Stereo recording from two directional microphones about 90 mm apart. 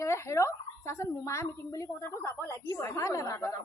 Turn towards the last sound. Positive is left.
turn(degrees=35)  # may be behind; listen again after turning